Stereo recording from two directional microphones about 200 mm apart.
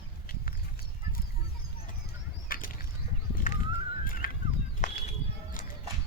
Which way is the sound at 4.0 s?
45° left (ahead or behind).